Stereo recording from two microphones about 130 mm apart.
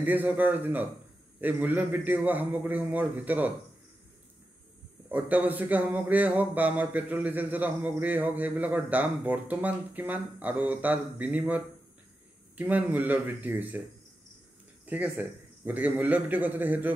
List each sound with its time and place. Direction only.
0.0 s speech: 15° right (ahead or behind)
5.1 s speech: 15° right (ahead or behind)
14.9 s speech: 15° right (ahead or behind)